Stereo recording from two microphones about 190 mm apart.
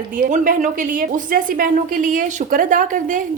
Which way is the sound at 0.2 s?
45° right (ahead or behind).